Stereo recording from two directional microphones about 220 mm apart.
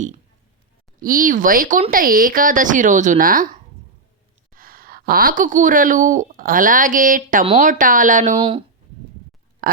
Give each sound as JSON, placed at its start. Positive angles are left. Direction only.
{"t": 0.9, "sound": "a woman's voice", "side_deg": -40}